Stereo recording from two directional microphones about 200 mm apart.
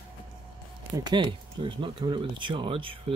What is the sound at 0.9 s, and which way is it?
Speech, 20° right (ahead or behind).